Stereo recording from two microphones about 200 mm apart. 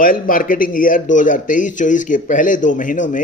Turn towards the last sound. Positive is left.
turn(degrees=40)  # may be behind; listen again after turning